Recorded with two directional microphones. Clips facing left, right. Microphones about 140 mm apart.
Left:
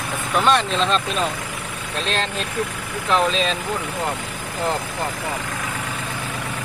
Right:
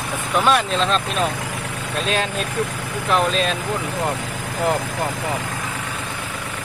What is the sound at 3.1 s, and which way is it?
Speech, 5° right (ahead or behind).